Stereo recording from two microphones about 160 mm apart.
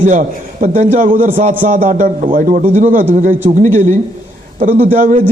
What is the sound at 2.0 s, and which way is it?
A man's voice, 60° right (ahead or behind).